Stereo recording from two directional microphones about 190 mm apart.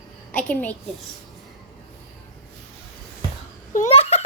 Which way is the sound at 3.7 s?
40° left (ahead or behind).